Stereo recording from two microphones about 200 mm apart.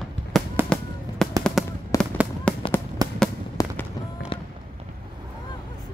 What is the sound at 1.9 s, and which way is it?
Fireworks, 15° left (ahead or behind).